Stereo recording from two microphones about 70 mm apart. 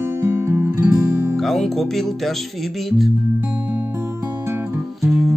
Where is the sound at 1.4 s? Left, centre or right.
Centre.